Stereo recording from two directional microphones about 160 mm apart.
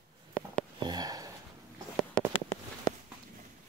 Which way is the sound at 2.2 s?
5° left (ahead or behind).